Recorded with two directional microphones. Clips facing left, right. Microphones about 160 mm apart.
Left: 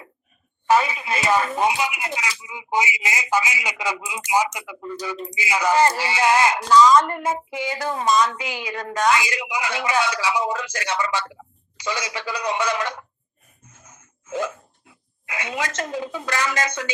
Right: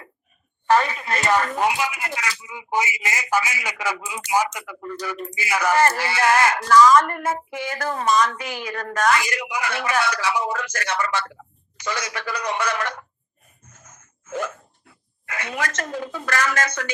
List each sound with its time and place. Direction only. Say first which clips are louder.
0.7 s speech: even; 10° left (ahead or behind)